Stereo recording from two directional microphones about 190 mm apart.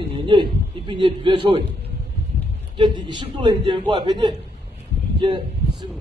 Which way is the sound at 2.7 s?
25° right (ahead or behind).